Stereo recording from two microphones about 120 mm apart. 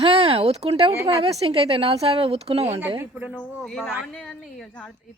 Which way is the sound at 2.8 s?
15° right (ahead or behind).